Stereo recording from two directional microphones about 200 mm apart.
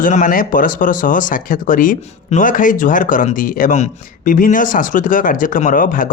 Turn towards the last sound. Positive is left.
turn(degrees=45)  # may be behind; listen again after turning